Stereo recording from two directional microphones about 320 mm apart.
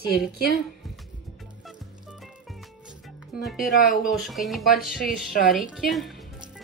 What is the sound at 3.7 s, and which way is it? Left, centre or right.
Speech, left.